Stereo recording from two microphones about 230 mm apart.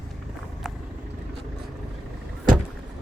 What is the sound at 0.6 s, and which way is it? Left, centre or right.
Vehicle, centre.